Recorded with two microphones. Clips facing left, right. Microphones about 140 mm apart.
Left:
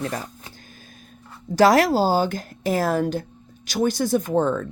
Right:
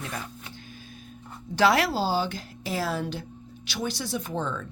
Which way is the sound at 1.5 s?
40° left (ahead or behind).